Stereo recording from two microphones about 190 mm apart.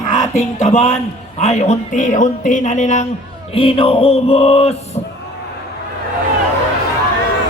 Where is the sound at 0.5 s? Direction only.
35° left (ahead or behind).